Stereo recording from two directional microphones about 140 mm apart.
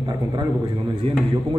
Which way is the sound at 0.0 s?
30° right (ahead or behind).